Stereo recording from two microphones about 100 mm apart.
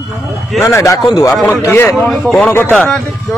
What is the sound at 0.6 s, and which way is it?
Speech, 30° left (ahead or behind).